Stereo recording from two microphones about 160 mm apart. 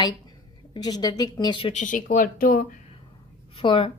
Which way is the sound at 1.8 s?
55° left (ahead or behind).